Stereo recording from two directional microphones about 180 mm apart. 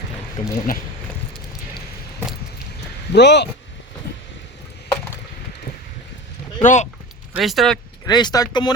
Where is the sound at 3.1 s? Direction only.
70° left (ahead or behind).